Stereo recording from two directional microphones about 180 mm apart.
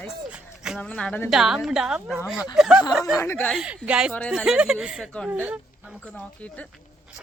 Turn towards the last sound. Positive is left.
turn(degrees=5)  # may be behind; listen again after turning